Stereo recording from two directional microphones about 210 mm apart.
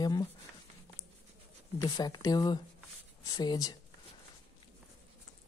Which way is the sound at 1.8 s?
15° left (ahead or behind).